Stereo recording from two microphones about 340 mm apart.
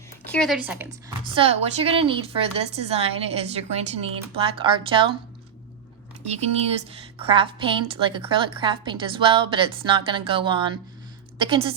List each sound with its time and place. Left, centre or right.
0.3 s speech: centre
1.4 s a woman's voice: centre
6.3 s a woman's voice: centre